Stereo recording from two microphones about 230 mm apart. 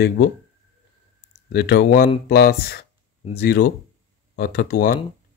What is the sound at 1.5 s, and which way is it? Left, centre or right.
Speech, left.